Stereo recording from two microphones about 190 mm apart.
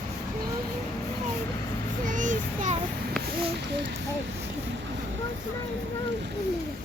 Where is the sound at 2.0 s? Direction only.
40° right (ahead or behind).